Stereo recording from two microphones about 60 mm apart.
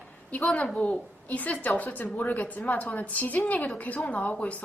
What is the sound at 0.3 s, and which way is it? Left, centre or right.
A woman's voice, left.